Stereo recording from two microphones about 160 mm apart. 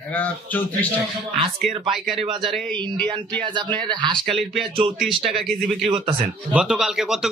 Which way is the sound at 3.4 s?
30° right (ahead or behind).